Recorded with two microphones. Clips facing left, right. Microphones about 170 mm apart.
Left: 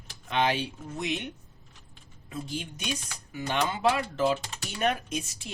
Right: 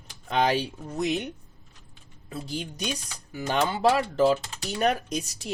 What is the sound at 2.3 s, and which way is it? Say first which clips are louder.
Speech: right 2 dB; 35° right (ahead or behind).